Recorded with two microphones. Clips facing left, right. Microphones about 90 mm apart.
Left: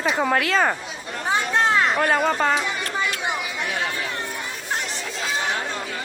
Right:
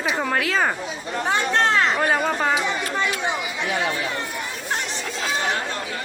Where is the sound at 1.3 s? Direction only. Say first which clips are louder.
Even; 5° left (ahead or behind).